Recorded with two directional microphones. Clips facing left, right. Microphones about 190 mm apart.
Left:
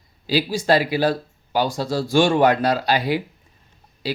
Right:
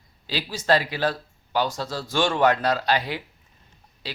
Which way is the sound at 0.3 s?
10° left (ahead or behind).